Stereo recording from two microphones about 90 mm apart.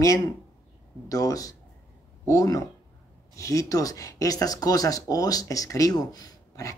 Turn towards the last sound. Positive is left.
turn(degrees=40)  # may be behind; listen again after turning